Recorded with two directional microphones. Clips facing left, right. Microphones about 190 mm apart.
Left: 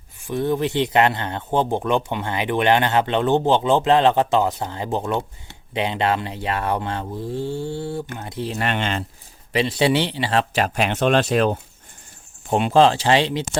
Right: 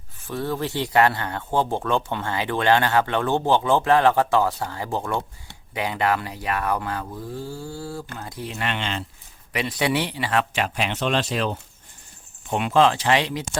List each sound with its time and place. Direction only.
0.3 s speech: 20° left (ahead or behind)
8.6 s speech: 50° left (ahead or behind)
9.5 s a man's voice: 30° left (ahead or behind); by 11.6 s 55° left (ahead or behind)
12.5 s speech: 30° left (ahead or behind)